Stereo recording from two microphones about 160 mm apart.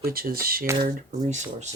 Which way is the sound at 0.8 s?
55° right (ahead or behind).